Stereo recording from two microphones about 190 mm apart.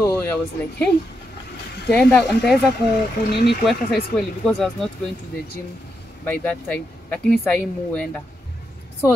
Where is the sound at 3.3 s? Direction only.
60° left (ahead or behind).